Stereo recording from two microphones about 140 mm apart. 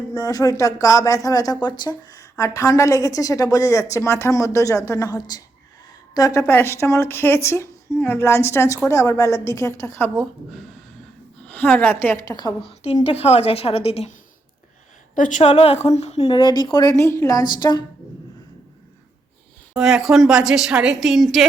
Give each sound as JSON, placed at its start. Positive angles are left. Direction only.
{"t": 0.1, "sound": "a woman's voice", "side_deg": 25}
{"t": 11.4, "sound": "a woman's voice", "side_deg": 10}
{"t": 12.8, "sound": "a woman's voice", "side_deg": 45}
{"t": 15.1, "sound": "a woman's voice", "side_deg": 65}
{"t": 16.2, "sound": "a woman's voice", "side_deg": 30}
{"t": 19.7, "sound": "a woman's voice", "side_deg": -5}